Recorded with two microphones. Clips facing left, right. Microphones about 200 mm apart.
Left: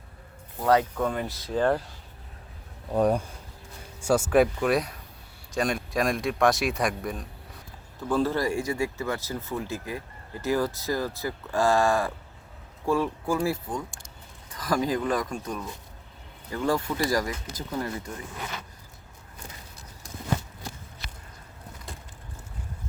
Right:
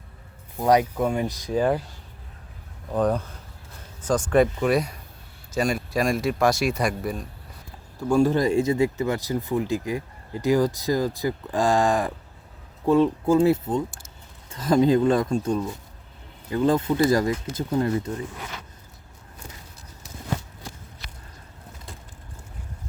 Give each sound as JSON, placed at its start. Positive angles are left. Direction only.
{"t": 0.6, "sound": "speech", "side_deg": -15}
{"t": 2.9, "sound": "speech", "side_deg": 10}
{"t": 7.9, "sound": "speech", "side_deg": -15}